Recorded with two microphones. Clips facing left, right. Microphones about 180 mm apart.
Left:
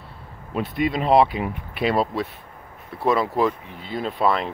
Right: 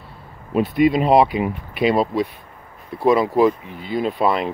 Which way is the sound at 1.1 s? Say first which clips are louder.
Right 2 dB; 5° right (ahead or behind).